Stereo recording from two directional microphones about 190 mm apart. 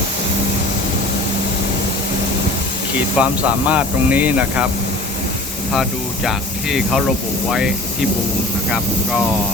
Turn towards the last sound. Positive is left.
turn(degrees=0)  # may be behind; listen again after turning